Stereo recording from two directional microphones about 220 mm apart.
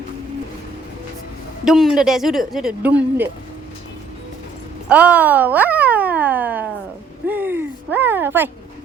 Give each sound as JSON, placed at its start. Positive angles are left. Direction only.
{"t": 1.6, "sound": "speech", "side_deg": 0}
{"t": 4.9, "sound": "speech", "side_deg": -5}
{"t": 7.3, "sound": "a sound", "side_deg": -10}